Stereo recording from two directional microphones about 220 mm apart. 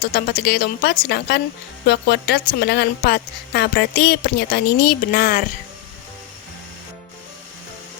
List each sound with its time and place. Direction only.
0.1 s a woman's voice: 45° left (ahead or behind)